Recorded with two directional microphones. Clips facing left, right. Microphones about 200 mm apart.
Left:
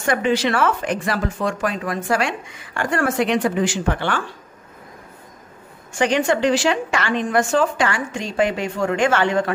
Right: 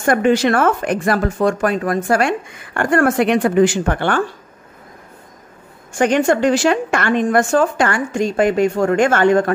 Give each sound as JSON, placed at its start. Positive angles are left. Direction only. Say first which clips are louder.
{"t": 0.0, "sound": "speech", "louder": "right 5 dB", "side_deg": -50}
{"t": 5.9, "sound": "speech", "louder": "right 4 dB", "side_deg": -50}